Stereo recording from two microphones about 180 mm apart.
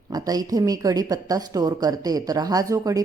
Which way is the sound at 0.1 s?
20° right (ahead or behind).